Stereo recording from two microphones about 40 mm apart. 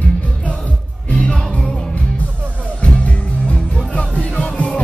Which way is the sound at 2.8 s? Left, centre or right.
Left.